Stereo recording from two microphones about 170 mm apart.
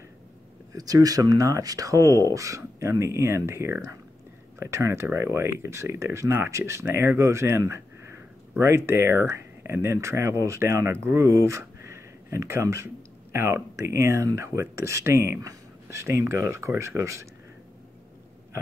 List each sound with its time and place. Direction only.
0.7 s speech: 20° right (ahead or behind)